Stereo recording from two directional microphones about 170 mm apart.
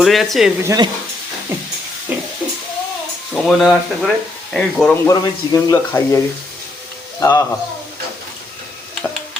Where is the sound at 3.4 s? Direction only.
Centre (ahead or behind).